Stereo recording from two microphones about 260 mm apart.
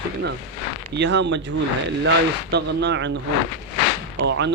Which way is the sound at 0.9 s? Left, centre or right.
Right.